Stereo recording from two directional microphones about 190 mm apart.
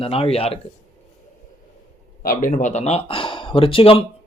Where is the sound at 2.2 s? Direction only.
45° left (ahead or behind).